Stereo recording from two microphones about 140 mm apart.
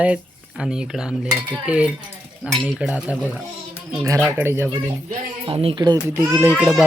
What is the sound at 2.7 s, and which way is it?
Speech, 5° right (ahead or behind).